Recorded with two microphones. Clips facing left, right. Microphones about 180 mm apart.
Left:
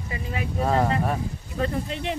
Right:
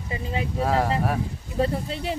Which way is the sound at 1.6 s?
35° right (ahead or behind).